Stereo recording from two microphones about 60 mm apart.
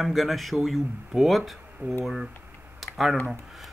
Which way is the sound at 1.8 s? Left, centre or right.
Right.